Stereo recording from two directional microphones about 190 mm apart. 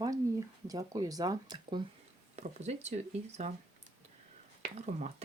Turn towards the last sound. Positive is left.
turn(degrees=-35)  # may be behind; listen again after turning